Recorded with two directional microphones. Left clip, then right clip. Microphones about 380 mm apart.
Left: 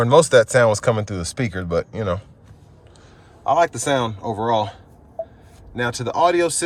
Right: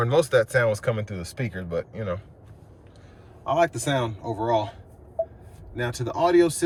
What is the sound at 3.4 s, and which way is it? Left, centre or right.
Speech, centre.